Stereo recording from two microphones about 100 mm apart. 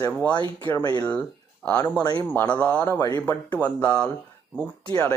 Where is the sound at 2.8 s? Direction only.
35° left (ahead or behind).